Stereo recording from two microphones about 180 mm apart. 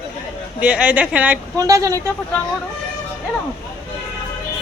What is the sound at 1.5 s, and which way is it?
Speech, 20° right (ahead or behind).